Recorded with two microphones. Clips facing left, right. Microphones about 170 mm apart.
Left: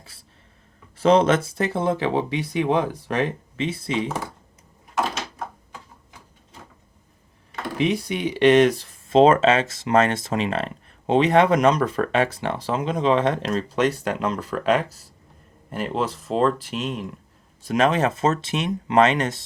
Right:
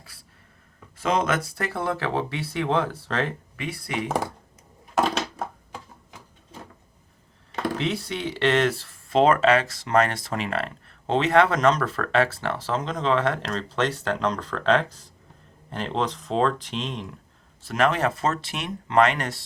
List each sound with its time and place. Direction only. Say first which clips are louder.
0.9 s speech: left 7 dB; 30° left (ahead or behind)
7.8 s speech: left 5 dB; 15° left (ahead or behind)
17.6 s speech: left 3 dB; 20° left (ahead or behind)